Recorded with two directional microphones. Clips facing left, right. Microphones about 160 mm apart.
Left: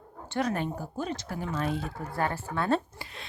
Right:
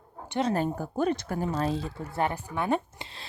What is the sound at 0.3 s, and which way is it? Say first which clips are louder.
Speech: right 2 dB; 25° right (ahead or behind).